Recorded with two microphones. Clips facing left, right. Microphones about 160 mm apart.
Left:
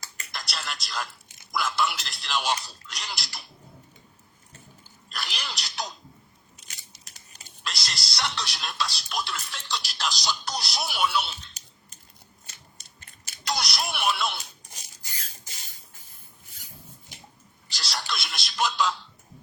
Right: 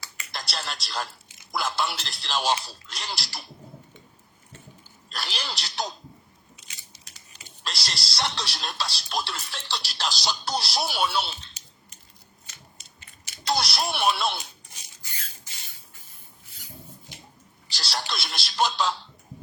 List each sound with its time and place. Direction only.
0.3 s a sound: 30° right (ahead or behind)
1.5 s speech: 30° right (ahead or behind)
5.1 s speech: 30° right (ahead or behind)
6.7 s biting: 50° left (ahead or behind)
7.6 s speech: 30° right (ahead or behind)
12.7 s mechanisms: 45° left (ahead or behind)
13.5 s speech: 30° right (ahead or behind)
14.7 s a sound: 40° left (ahead or behind)
17.7 s speech: 30° right (ahead or behind)